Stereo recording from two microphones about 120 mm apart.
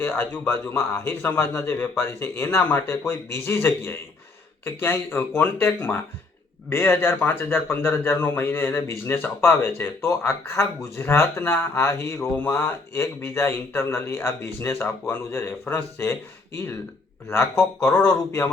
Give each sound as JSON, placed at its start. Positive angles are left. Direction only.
{"t": 0.0, "sound": "a man's voice", "side_deg": 15}
{"t": 17.2, "sound": "a man's voice", "side_deg": 20}